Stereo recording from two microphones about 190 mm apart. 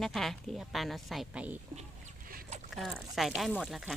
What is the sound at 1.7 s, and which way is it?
Chicken, 45° right (ahead or behind).